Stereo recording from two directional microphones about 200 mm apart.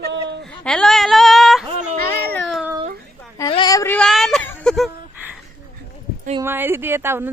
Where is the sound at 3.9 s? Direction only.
Centre (ahead or behind).